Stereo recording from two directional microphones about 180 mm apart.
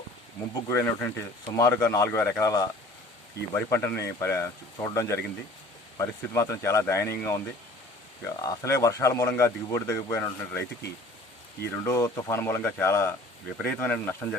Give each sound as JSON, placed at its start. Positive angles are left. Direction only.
{"t": 0.5, "sound": "speech", "side_deg": 15}
{"t": 11.8, "sound": "speech", "side_deg": 15}